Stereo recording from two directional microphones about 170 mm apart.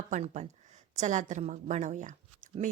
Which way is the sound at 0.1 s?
45° right (ahead or behind).